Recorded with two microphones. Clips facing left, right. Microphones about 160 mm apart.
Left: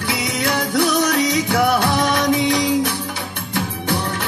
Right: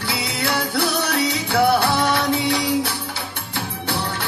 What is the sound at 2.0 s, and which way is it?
Music, 45° left (ahead or behind).